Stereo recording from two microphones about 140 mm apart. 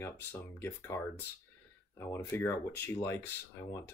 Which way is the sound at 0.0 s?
15° left (ahead or behind).